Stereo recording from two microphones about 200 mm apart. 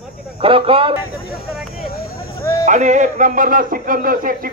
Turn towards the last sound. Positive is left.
turn(degrees=-45)  # may be behind; listen again after turning